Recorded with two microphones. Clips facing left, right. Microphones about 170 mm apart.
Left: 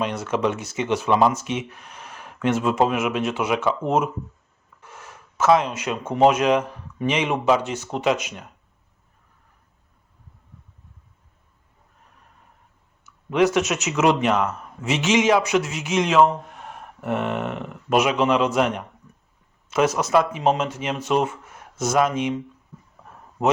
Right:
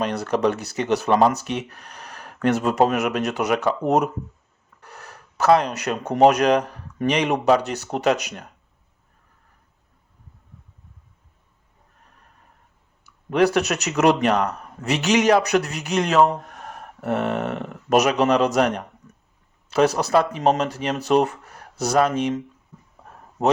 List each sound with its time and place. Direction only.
0.0 s speech: 35° right (ahead or behind)
4.8 s speech: 40° right (ahead or behind)
13.1 s speech: 35° right (ahead or behind)